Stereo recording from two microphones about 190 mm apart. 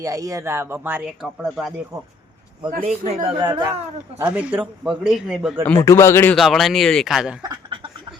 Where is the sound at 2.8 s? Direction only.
35° right (ahead or behind).